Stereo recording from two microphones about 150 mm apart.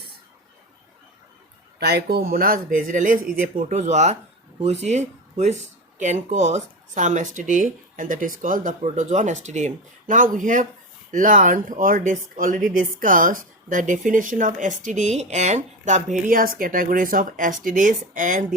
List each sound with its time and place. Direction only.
1.8 s speech: 90° right
2.7 s speech: 65° right (ahead or behind)
16.3 s speech: 70° right (ahead or behind)